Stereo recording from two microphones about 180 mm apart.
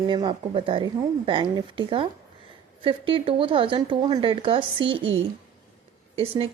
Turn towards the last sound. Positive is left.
turn(degrees=-30)  # may be behind; listen again after turning